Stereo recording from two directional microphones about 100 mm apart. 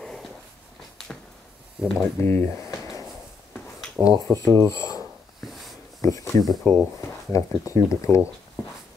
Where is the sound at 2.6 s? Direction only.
35° left (ahead or behind).